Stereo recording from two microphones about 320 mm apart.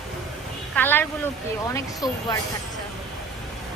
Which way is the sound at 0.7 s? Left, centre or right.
Centre.